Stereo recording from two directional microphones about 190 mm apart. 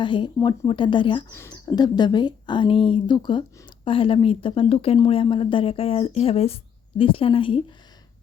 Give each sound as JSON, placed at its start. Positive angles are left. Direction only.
{"t": 0.0, "sound": "a woman's voice", "side_deg": 25}